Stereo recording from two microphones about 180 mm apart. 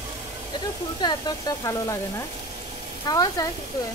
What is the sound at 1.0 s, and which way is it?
Speech, 20° left (ahead or behind).